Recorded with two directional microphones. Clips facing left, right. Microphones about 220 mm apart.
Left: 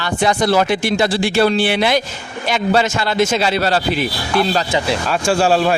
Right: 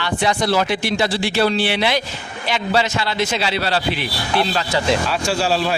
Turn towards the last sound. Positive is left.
turn(degrees=50)  # may be behind; listen again after turning